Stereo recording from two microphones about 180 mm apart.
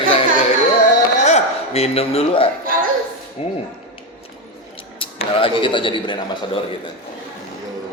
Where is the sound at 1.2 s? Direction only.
35° left (ahead or behind).